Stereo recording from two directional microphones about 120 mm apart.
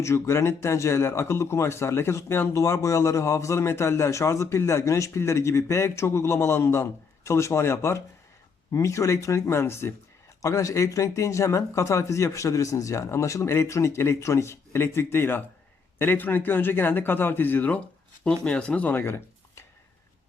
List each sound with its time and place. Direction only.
0.0 s a man's voice: 25° left (ahead or behind)